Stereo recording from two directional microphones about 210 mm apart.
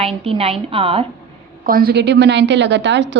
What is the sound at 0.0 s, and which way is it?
A woman's voice, 25° right (ahead or behind).